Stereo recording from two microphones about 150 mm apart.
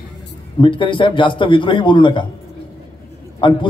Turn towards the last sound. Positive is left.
turn(degrees=35)  # may be behind; listen again after turning